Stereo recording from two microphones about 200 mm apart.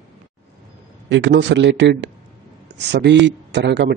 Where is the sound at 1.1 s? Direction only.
65° right (ahead or behind).